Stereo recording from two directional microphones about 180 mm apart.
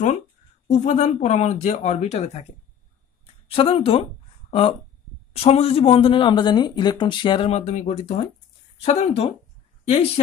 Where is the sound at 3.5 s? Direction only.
35° left (ahead or behind).